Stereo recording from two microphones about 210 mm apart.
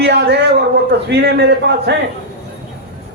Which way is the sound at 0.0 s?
55° right (ahead or behind).